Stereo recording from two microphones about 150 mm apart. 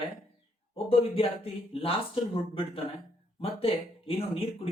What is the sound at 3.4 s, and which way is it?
Speech, 40° left (ahead or behind).